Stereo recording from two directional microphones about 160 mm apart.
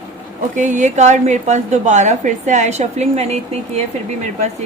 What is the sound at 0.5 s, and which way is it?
A woman's voice, 50° right (ahead or behind).